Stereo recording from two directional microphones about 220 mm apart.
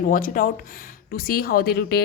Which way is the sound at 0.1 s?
40° left (ahead or behind).